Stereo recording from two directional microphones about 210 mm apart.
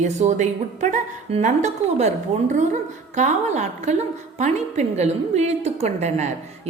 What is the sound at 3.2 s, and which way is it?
A woman's voice, 35° right (ahead or behind).